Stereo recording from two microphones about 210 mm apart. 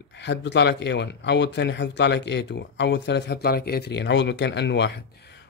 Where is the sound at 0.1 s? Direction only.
55° left (ahead or behind).